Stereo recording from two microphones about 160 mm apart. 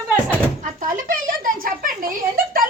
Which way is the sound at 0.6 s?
55° right (ahead or behind).